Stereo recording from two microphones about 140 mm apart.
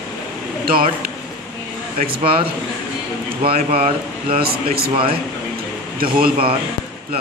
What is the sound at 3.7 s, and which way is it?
Speech, 90° right.